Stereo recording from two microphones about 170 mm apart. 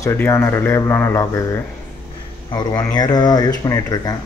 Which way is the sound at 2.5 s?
25° left (ahead or behind).